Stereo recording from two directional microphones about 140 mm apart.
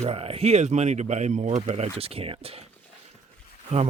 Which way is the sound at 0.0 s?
45° right (ahead or behind).